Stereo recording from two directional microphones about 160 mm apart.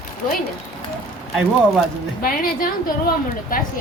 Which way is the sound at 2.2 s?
65° left (ahead or behind).